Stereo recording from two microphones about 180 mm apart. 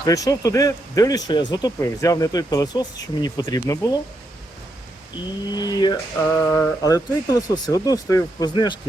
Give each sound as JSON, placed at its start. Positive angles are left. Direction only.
{"t": 0.0, "sound": "speech", "side_deg": 20}
{"t": 5.5, "sound": "speech", "side_deg": 20}